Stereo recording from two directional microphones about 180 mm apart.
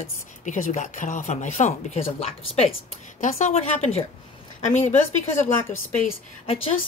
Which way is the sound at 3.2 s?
40° left (ahead or behind).